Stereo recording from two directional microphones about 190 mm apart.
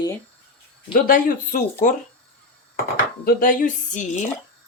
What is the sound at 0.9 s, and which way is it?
Speech, 50° left (ahead or behind).